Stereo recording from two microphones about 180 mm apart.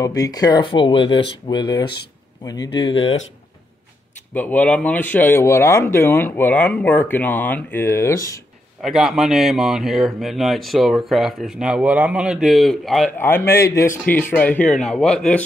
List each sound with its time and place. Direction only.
0.0 s speech: 20° left (ahead or behind)
4.3 s speech: 10° left (ahead or behind)
8.8 s speech: centre (ahead or behind)
13.2 s speech: 15° left (ahead or behind)